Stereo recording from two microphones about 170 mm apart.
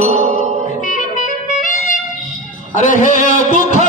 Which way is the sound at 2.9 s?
50° left (ahead or behind).